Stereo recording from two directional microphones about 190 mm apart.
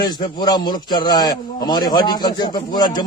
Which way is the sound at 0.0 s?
20° left (ahead or behind).